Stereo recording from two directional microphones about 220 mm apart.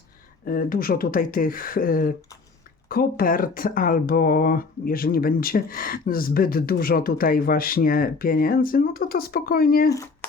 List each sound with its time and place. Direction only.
0.4 s speech: 40° left (ahead or behind)